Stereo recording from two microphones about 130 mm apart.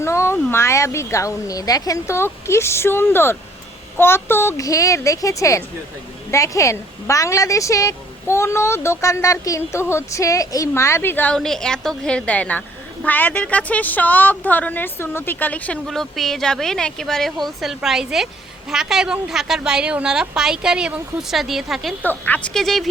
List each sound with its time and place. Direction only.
0.0 s a woman's voice: 20° left (ahead or behind); by 21.9 s centre (ahead or behind)
22.0 s a woman's voice: 15° left (ahead or behind)
22.4 s a woman's voice: centre (ahead or behind)